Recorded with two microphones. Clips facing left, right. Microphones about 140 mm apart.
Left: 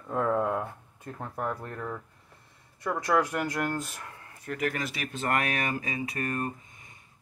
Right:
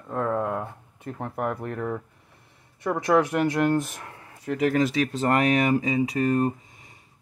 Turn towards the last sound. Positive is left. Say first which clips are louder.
# right 9 dB
turn(degrees=-20)  # may be behind; listen again after turning